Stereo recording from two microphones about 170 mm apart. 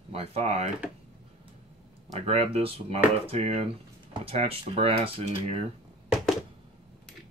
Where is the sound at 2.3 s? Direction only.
35° right (ahead or behind).